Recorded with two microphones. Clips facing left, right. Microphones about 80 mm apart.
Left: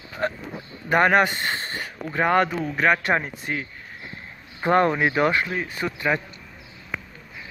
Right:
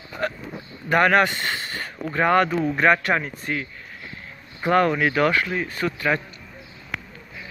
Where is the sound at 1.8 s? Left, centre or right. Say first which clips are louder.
Right 2 dB; centre.